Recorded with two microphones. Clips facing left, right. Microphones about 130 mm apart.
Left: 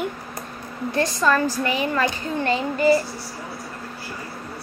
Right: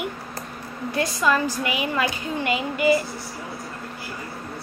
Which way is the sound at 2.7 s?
35° left (ahead or behind).